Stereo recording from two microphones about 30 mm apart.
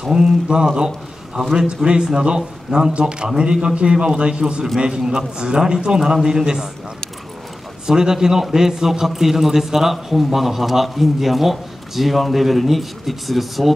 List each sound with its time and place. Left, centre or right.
0.1 s a man's voice: right
1.9 s a man's voice: right
7.8 s a man's voice: right; by 13.7 s centre